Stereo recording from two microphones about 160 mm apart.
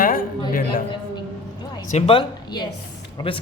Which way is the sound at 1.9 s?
40° left (ahead or behind).